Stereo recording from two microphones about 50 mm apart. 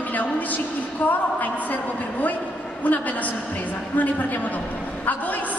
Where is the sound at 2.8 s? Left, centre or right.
Left.